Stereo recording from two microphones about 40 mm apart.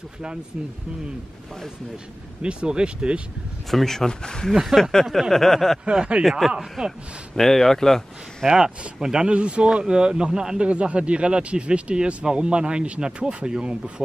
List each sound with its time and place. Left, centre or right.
2.4 s speech: right
3.7 s speech: centre
4.6 s speech: centre
5.3 s speech: centre
5.9 s speech: right
6.8 s speech: centre
7.3 s speech: centre
8.5 s speech: centre
10.7 s speech: right